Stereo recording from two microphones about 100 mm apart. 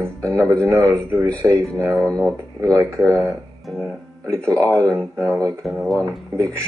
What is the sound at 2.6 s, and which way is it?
Speech, 35° right (ahead or behind).